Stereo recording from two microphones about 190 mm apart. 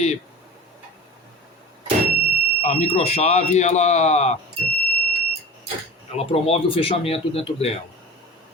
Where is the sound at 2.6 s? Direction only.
35° left (ahead or behind).